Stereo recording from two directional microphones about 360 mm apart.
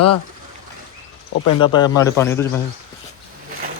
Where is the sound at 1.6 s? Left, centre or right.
Centre.